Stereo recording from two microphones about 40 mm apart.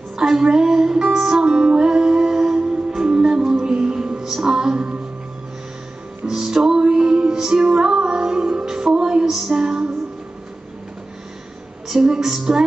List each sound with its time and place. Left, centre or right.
0.1 s music: centre
6.2 s music: centre
11.9 s music: centre